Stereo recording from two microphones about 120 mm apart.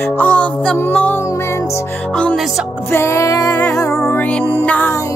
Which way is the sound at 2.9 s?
25° left (ahead or behind).